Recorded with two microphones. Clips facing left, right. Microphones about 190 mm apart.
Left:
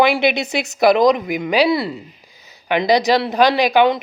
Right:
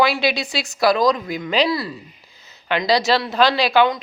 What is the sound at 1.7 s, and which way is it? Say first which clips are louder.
A woman's voice: left 5 dB; 25° left (ahead or behind).